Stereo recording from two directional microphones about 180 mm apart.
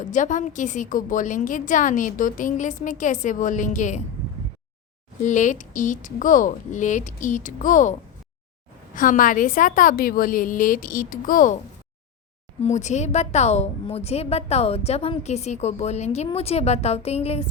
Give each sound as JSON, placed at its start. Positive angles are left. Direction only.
{"t": 0.0, "sound": "a woman's voice", "side_deg": 45}
{"t": 5.2, "sound": "a woman's voice", "side_deg": 45}
{"t": 9.0, "sound": "a woman's voice", "side_deg": 50}
{"t": 12.6, "sound": "a woman's voice", "side_deg": 40}